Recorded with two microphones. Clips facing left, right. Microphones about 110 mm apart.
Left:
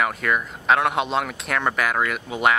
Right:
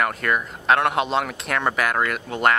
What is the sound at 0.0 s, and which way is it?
Speech, centre (ahead or behind).